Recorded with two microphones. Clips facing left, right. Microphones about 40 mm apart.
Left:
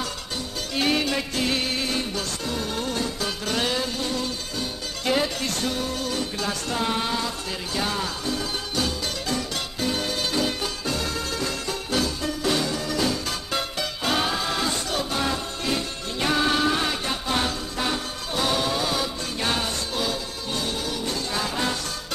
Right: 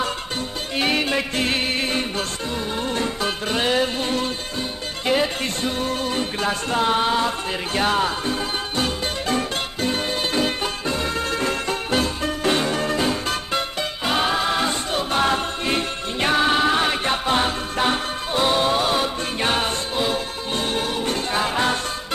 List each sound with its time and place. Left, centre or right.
0.7 s music: right
2.5 s music: right
2.9 s music: right
3.7 s music: right
5.0 s music: right
13.5 s music: right